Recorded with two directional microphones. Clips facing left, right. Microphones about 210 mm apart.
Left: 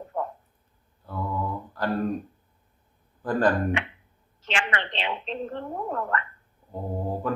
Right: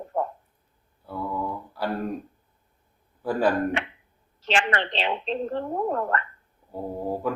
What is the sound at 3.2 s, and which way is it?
Speech, 10° right (ahead or behind).